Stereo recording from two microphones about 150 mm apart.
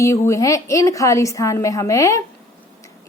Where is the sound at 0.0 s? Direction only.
20° left (ahead or behind).